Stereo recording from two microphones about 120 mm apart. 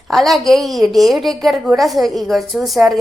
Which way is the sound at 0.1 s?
Centre (ahead or behind).